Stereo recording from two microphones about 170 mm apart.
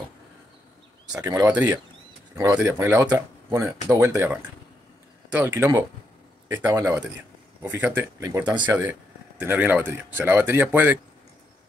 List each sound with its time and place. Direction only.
1.2 s speech: 15° right (ahead or behind)